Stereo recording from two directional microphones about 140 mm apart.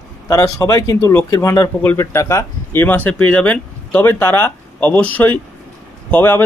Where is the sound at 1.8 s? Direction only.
15° left (ahead or behind).